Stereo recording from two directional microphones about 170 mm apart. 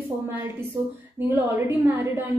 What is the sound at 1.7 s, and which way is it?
Speech, 10° right (ahead or behind).